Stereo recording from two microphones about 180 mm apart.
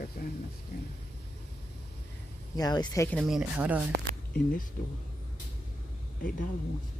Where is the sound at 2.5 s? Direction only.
20° left (ahead or behind).